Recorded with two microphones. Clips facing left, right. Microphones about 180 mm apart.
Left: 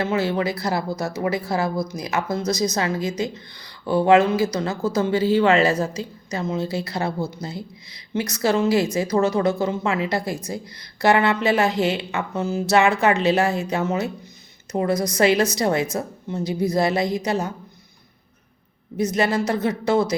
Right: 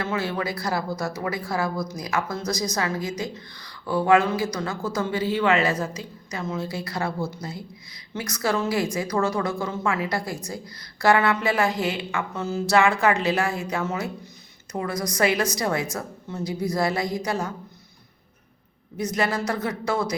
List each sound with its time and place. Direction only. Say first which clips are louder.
0.0 s speech: left 5 dB; 25° left (ahead or behind)
8.1 s speech: left 5 dB; 25° left (ahead or behind)
18.9 s speech: left 4 dB; 25° left (ahead or behind)